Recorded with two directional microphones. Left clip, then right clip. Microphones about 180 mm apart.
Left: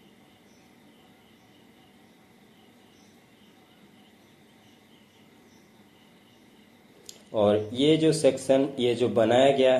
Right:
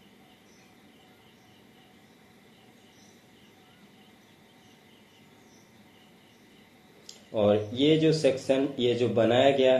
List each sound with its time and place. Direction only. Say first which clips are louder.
7.2 s speech: left 1 dB; 25° left (ahead or behind)